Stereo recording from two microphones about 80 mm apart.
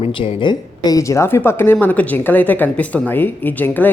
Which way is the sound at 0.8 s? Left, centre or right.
Left.